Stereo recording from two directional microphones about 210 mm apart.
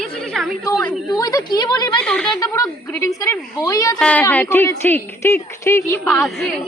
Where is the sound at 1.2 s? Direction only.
20° left (ahead or behind).